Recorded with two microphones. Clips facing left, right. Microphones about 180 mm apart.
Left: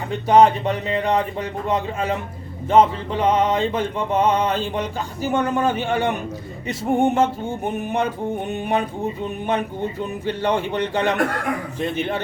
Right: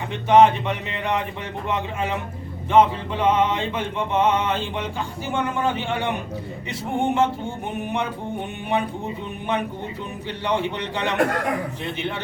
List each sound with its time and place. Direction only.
0.3 s mantra: 35° left (ahead or behind)
6.7 s music: 45° left (ahead or behind)
10.2 s music: 45° left (ahead or behind)